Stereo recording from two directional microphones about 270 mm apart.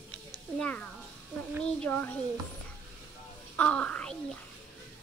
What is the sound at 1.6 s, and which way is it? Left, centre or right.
Speech, centre.